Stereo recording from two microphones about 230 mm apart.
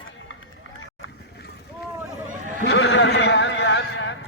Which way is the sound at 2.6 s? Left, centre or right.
Left.